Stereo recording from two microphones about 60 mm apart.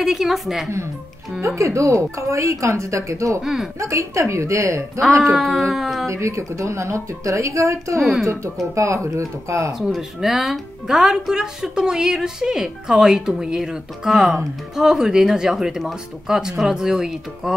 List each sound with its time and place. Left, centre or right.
0.0 s speech: centre
1.4 s speech: right
5.2 s speech: centre
6.0 s speech: right
8.0 s speech: centre
8.7 s speech: right
9.8 s speech: centre